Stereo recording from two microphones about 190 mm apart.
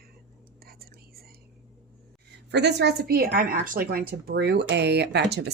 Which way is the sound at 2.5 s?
65° right (ahead or behind).